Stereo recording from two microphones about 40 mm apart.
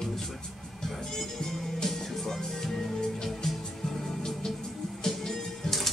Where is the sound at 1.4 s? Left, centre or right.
Centre.